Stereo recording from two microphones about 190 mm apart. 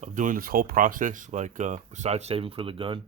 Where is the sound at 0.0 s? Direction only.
40° right (ahead or behind).